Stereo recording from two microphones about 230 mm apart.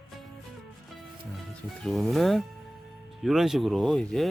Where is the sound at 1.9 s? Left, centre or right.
Centre.